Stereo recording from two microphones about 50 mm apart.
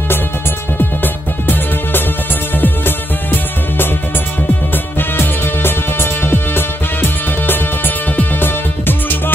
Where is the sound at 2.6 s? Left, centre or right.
Left.